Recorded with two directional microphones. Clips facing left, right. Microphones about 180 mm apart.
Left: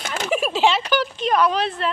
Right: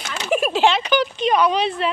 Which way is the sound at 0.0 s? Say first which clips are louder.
Left 3 dB; 50° left (ahead or behind).